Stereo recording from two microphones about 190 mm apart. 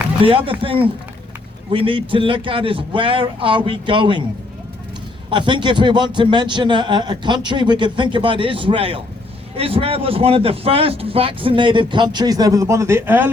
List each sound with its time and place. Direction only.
0.3 s speech: 30° right (ahead or behind)
5.3 s speech: 25° right (ahead or behind)